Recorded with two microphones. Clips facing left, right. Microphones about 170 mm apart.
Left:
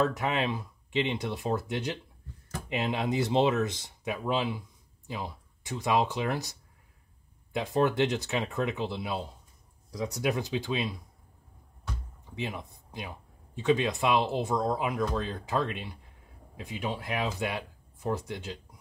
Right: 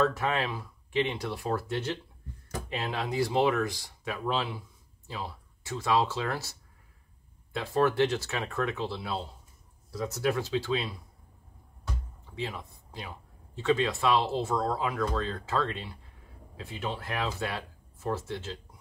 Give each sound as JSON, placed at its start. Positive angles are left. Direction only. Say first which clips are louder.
{"t": 0.0, "sound": "speech", "louder": "even", "side_deg": 15}
{"t": 12.4, "sound": "speech", "louder": "even", "side_deg": 20}